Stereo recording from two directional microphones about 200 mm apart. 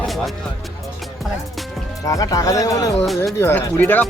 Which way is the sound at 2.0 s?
15° left (ahead or behind).